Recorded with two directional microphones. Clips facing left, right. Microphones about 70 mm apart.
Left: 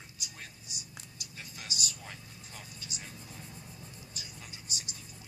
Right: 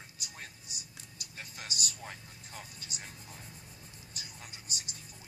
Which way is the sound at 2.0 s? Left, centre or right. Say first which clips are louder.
Right 1 dB; right.